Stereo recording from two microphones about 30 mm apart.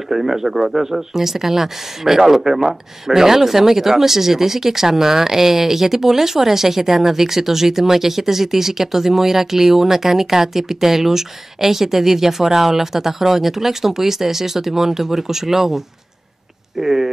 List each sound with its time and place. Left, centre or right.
0.1 s speech: centre